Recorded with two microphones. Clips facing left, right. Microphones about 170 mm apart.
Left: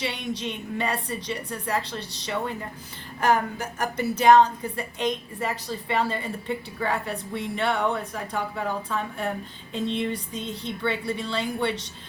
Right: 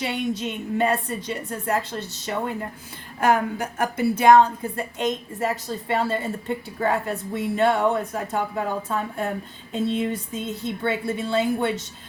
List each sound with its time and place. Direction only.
0.0 s a woman's voice: 50° right (ahead or behind)